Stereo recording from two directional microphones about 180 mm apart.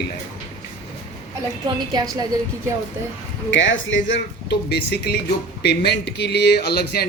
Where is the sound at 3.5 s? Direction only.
90° left.